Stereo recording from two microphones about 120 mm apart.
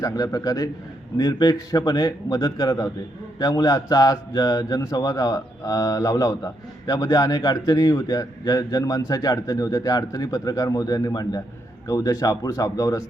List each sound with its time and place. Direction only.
0.0 s speech: 30° left (ahead or behind)